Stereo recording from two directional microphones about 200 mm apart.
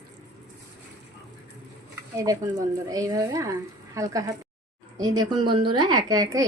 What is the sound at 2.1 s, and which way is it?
A woman's voice, 15° right (ahead or behind).